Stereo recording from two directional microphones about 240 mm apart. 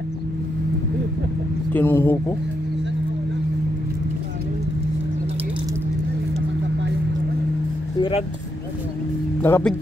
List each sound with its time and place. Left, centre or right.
1.7 s speech: centre
9.4 s speech: centre